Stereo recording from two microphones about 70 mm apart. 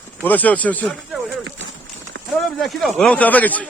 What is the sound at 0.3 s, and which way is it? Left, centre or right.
Speech, left.